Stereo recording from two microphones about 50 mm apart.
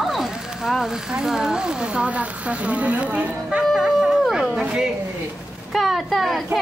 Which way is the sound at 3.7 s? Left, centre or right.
Centre.